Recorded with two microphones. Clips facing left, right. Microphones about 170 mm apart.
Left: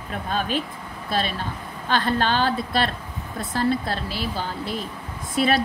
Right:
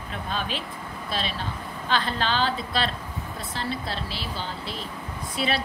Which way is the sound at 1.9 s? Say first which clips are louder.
Left 4 dB; 50° left (ahead or behind).